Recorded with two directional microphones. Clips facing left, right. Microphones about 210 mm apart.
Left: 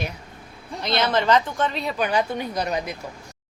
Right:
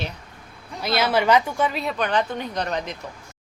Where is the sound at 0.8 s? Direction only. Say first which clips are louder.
Right 1 dB; 5° right (ahead or behind); by 2.9 s 10° left (ahead or behind).